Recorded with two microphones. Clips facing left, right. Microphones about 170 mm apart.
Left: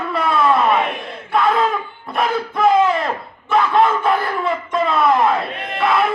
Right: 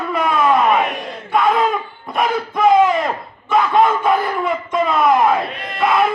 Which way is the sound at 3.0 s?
15° right (ahead or behind).